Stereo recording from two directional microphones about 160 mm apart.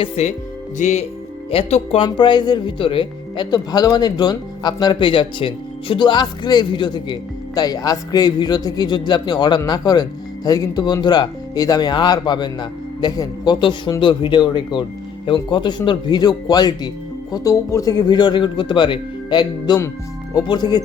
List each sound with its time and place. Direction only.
0.0 s speech: 45° left (ahead or behind); by 20.8 s 25° left (ahead or behind)